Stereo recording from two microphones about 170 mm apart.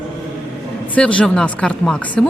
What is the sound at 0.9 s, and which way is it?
Speech, 5° left (ahead or behind).